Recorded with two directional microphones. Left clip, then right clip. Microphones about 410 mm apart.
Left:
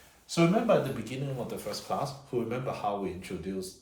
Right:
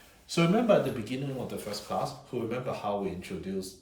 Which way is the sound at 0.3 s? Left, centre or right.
Centre.